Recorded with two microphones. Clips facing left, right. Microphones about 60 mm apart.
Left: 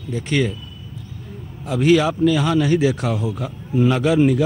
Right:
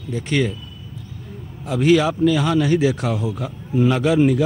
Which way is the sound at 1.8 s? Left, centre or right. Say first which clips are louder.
Even; centre.